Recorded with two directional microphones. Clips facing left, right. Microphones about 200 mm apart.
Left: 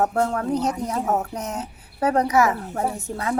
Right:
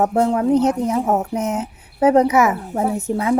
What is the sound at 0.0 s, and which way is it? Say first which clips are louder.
Speech: right 5 dB; 20° right (ahead or behind).